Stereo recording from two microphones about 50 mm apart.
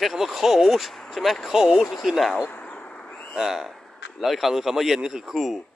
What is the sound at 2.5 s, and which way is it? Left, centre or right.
Bird, left.